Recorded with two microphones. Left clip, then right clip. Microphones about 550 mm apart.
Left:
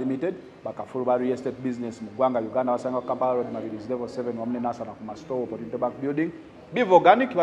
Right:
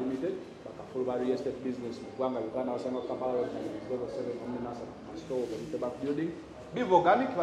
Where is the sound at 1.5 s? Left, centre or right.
Left.